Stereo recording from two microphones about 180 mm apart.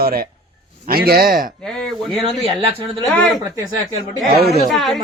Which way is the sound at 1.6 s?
5° left (ahead or behind).